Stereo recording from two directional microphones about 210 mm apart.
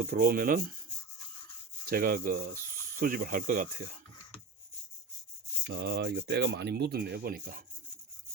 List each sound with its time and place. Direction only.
0.0 s speech: 45° right (ahead or behind)
1.9 s speech: 45° right (ahead or behind)
5.6 s speech: 50° right (ahead or behind)